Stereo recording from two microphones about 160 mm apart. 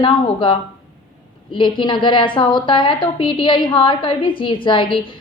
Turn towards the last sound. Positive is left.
turn(degrees=30)  # may be behind; listen again after turning